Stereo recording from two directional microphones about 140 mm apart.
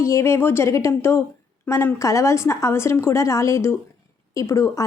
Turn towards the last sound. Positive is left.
turn(degrees=20)  # may be behind; listen again after turning